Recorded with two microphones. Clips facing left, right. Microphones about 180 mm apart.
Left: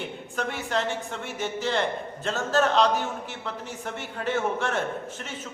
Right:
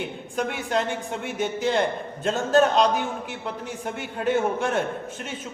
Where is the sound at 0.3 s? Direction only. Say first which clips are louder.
Right 3 dB; 15° right (ahead or behind).